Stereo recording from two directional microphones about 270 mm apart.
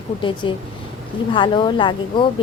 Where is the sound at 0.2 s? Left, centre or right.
Centre.